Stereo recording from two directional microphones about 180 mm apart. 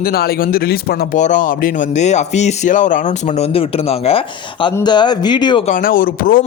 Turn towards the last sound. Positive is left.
turn(degrees=55)  # may be behind; listen again after turning